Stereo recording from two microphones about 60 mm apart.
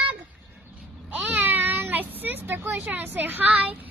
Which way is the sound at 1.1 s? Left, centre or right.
Right.